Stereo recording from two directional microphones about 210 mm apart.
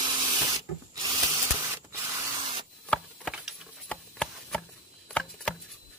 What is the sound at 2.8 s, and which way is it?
Chopping, centre (ahead or behind).